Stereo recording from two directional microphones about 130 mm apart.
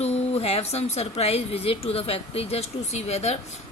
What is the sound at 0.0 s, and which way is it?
A woman's voice, 55° left (ahead or behind).